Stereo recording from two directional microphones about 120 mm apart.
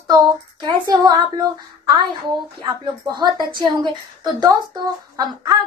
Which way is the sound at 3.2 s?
40° right (ahead or behind).